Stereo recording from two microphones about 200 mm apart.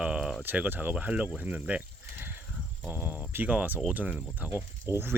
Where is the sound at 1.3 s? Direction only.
10° right (ahead or behind).